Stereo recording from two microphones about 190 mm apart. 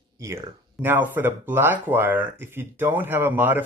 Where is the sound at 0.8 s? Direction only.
10° right (ahead or behind).